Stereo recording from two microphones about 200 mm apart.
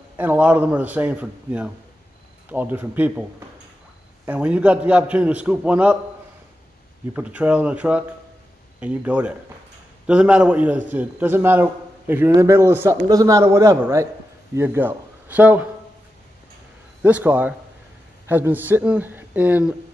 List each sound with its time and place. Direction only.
0.2 s a man's voice: 5° right (ahead or behind)
4.3 s a man's voice: 5° right (ahead or behind)
7.2 s a man's voice: 5° right (ahead or behind)
17.0 s a man's voice: 10° right (ahead or behind)